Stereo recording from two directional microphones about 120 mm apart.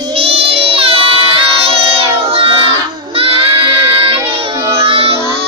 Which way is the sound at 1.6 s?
55° right (ahead or behind).